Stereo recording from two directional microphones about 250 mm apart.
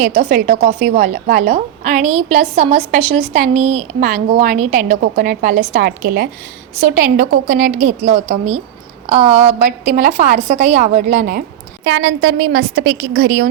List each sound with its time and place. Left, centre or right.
0.0 s a woman's voice: right
11.9 s a woman's voice: right